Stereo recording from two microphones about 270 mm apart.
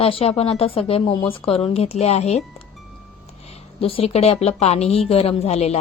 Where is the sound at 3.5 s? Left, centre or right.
Left.